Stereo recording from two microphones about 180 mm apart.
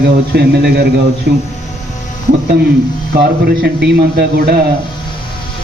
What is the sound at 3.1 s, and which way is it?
A man's voice, 60° right (ahead or behind).